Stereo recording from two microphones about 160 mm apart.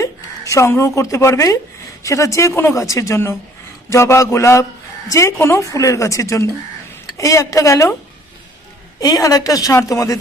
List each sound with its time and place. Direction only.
0.0 s speech: 20° left (ahead or behind)
3.8 s a sound: 15° left (ahead or behind)
5.1 s speech: 15° left (ahead or behind)
9.0 s speech: 20° left (ahead or behind)